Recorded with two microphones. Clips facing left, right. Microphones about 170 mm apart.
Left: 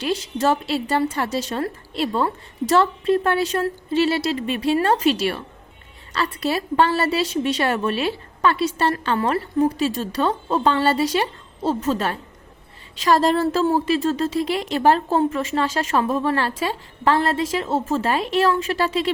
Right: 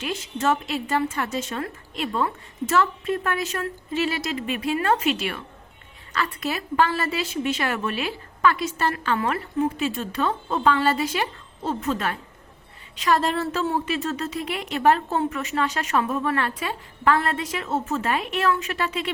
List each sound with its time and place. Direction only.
0.0 s a woman's voice: 35° left (ahead or behind)
6.1 s a woman's voice: 30° left (ahead or behind)